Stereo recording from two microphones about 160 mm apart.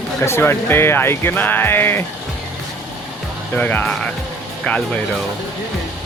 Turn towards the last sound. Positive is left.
turn(degrees=5)  # may be behind; listen again after turning